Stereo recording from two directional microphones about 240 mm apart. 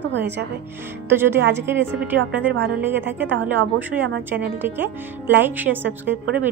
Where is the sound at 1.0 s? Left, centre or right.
Centre.